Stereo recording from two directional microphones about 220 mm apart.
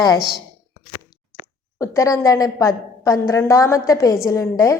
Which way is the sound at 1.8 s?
15° left (ahead or behind).